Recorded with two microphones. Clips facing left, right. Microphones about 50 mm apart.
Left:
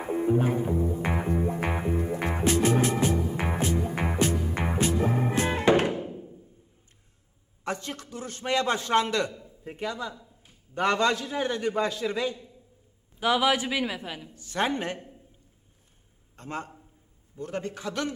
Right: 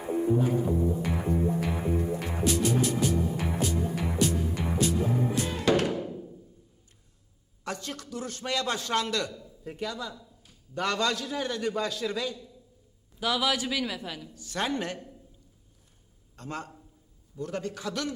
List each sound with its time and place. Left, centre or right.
0.0 s music: left
7.6 s a man's voice: left
16.3 s a man's voice: left